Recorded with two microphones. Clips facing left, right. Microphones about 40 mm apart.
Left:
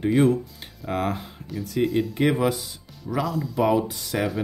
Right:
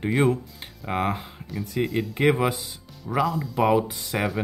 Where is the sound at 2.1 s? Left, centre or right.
Centre.